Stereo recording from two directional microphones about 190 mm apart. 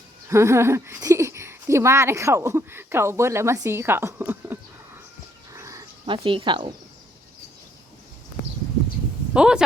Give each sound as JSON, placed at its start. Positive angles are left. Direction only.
{"t": 0.3, "sound": "a woman's voice", "side_deg": -15}
{"t": 5.5, "sound": "dog", "side_deg": -15}
{"t": 9.3, "sound": "speech", "side_deg": -5}